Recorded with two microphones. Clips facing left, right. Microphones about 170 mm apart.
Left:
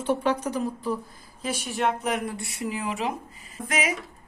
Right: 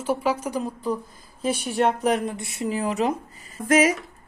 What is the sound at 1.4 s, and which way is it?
Speech, 35° right (ahead or behind).